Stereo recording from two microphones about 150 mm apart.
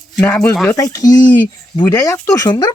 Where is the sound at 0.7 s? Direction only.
20° left (ahead or behind).